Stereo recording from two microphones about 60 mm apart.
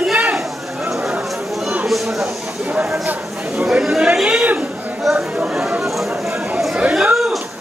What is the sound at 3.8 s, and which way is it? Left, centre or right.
Speech, centre.